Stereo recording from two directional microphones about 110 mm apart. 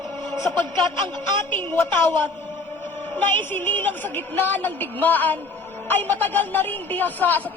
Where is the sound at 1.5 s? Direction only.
15° left (ahead or behind).